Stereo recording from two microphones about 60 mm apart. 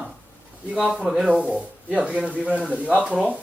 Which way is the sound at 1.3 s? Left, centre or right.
Right.